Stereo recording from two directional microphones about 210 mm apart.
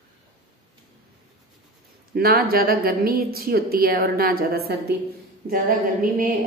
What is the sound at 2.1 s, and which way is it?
A woman's voice, 45° right (ahead or behind).